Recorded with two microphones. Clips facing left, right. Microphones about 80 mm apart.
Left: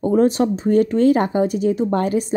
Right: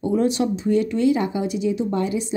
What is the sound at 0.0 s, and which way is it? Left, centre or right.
Speech, left.